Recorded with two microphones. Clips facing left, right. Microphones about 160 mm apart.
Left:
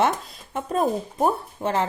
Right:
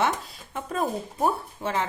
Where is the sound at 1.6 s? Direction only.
40° left (ahead or behind).